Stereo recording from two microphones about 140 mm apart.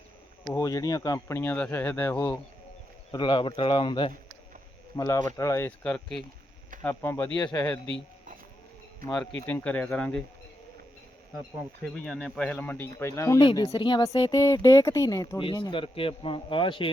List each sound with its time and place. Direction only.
0.4 s speech: 20° left (ahead or behind)
1.4 s speech: 10° left (ahead or behind)
3.1 s speech: 30° left (ahead or behind)
4.9 s speech: 20° left (ahead or behind)
5.8 s speech: 5° left (ahead or behind)
9.5 s speech: 10° left (ahead or behind)
11.9 s speech: 5° left (ahead or behind); by 16.9 s 35° left (ahead or behind)